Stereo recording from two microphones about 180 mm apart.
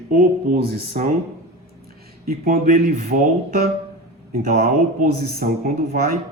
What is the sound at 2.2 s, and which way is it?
Speech, 55° right (ahead or behind).